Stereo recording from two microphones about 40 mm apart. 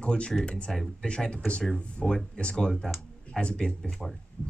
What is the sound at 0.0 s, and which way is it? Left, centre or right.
Speech, left.